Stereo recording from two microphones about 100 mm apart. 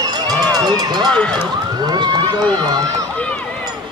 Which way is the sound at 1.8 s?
45° right (ahead or behind).